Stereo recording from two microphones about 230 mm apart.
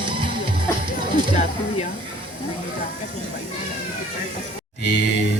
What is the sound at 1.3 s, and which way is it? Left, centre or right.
Speech, left.